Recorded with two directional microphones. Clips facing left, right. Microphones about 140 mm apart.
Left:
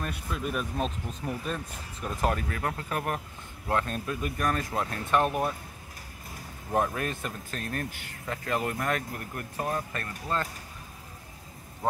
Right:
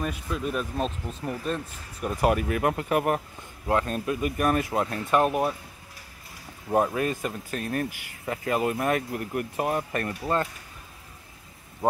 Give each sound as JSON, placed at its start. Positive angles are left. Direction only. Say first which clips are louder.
{"t": 0.0, "sound": "speech", "louder": "right 4 dB", "side_deg": 0}
{"t": 2.0, "sound": "speech", "louder": "right 5 dB", "side_deg": -10}
{"t": 6.7, "sound": "speech", "louder": "right 4 dB", "side_deg": -5}